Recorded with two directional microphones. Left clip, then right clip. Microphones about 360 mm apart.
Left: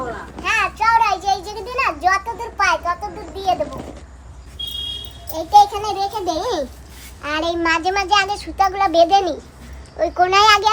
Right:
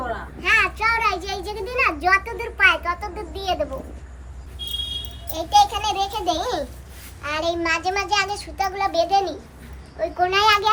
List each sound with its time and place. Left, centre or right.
0.4 s children playing: centre
5.3 s a child's voice: centre
7.2 s a child's voice: left